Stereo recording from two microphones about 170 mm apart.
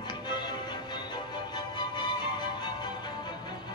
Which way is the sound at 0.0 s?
25° left (ahead or behind).